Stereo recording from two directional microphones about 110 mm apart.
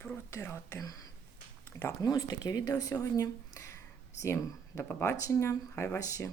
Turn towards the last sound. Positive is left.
turn(degrees=30)  # may be behind; listen again after turning